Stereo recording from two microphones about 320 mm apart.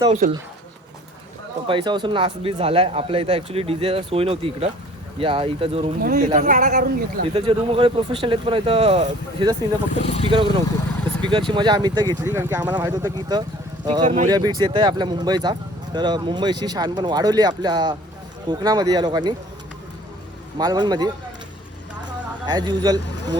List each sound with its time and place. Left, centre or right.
0.0 s speech: right
1.6 s speech: centre
10.0 s speech: centre
10.2 s speech: centre
20.6 s speech: centre
22.4 s speech: centre